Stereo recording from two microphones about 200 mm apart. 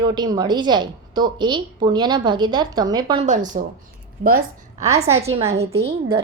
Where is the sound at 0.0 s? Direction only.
20° right (ahead or behind).